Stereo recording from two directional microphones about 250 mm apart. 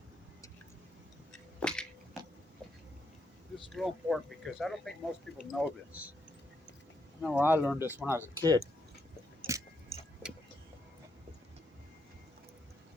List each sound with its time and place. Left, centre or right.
1.5 s a sound: centre
3.5 s speech: centre
7.2 s speech: centre
9.4 s chewing: left
10.2 s vehicle: centre